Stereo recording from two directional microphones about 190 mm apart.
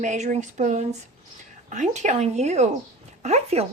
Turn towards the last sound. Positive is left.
turn(degrees=-35)  # may be behind; listen again after turning